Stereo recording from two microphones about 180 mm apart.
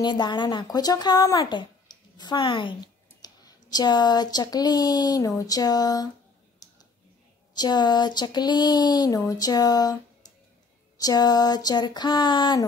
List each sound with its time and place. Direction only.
0.0 s speech: 25° left (ahead or behind)
6.6 s a sound: 20° left (ahead or behind)
7.5 s speech: 25° left (ahead or behind)